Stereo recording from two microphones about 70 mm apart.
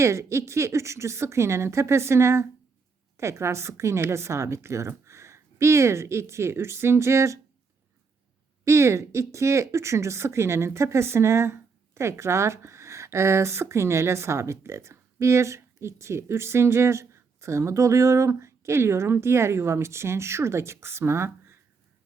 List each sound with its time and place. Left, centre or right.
0.0 s a woman's voice: right
8.6 s speech: right
21.2 s a sound: right